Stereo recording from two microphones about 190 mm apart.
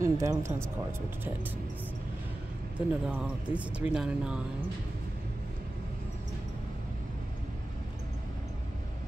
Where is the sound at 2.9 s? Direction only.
10° right (ahead or behind).